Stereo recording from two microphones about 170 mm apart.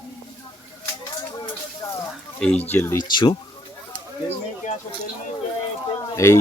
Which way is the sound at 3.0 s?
25° left (ahead or behind).